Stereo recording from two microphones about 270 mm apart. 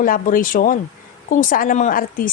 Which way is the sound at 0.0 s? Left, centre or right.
Left.